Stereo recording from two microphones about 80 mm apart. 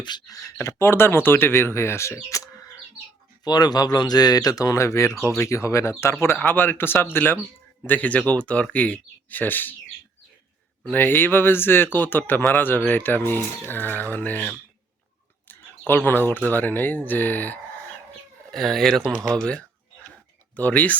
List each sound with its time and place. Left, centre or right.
0.3 s speech: left
0.6 s speech: left
3.4 s speech: left
10.8 s speech: left
15.9 s speech: left
18.5 s speech: centre